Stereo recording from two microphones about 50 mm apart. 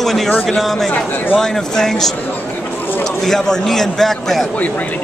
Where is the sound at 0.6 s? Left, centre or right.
Centre.